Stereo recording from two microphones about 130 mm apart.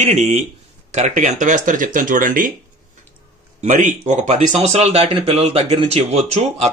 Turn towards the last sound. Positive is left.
turn(degrees=-55)  # may be behind; listen again after turning